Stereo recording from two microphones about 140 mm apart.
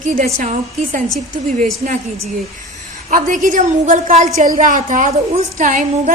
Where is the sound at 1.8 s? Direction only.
75° right (ahead or behind).